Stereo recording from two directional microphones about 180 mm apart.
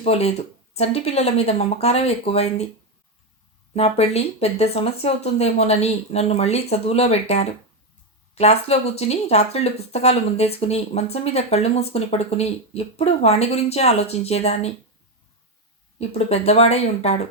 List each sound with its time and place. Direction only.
0.0 s speech: 35° left (ahead or behind)
3.8 s speech: 35° left (ahead or behind)
16.0 s speech: 35° left (ahead or behind)